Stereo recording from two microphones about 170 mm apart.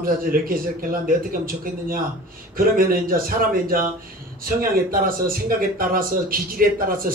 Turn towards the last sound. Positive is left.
turn(degrees=-60)  # may be behind; listen again after turning